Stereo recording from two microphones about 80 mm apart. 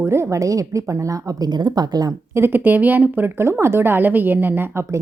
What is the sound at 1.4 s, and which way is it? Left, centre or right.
Speech, right.